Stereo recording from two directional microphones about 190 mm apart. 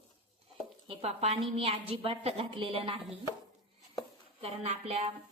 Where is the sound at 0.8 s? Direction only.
35° right (ahead or behind).